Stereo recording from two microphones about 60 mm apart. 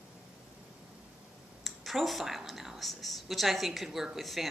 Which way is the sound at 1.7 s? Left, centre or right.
Centre.